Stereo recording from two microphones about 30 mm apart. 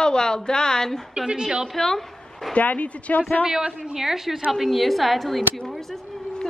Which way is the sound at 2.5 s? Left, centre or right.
Left.